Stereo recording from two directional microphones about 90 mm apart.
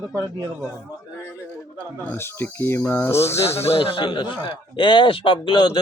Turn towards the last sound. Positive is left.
turn(degrees=65)  # may be behind; listen again after turning